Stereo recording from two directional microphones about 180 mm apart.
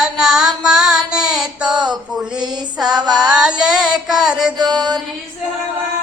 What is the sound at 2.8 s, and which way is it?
Music, 25° right (ahead or behind).